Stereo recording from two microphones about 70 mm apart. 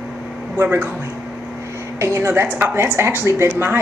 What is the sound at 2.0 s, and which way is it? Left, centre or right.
A woman's voice, right.